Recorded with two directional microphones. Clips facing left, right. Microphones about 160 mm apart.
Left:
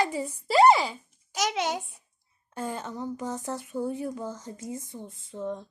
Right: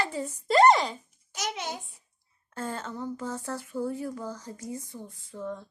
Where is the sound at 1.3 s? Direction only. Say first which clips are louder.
Left 6 dB; 90° left.